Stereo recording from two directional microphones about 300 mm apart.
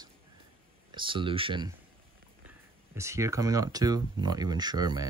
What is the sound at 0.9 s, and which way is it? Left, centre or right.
Speech, centre.